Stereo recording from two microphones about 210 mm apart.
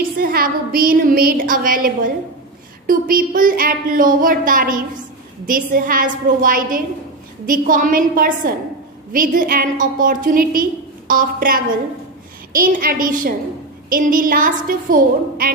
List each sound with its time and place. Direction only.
0.2 s a woman's voice: 45° right (ahead or behind)
2.9 s a woman's voice: 40° right (ahead or behind)